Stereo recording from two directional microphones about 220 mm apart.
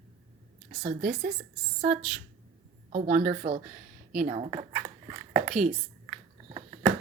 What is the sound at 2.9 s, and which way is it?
A woman's voice, 35° right (ahead or behind).